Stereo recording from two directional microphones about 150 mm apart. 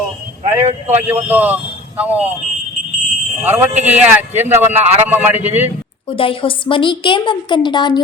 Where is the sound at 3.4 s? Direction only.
10° right (ahead or behind).